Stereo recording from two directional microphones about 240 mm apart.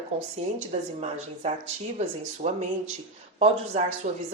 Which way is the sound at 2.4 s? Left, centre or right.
Right.